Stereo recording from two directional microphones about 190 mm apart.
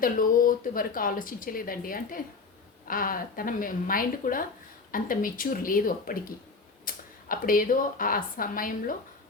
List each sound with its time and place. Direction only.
0.0 s a woman's voice: 45° left (ahead or behind)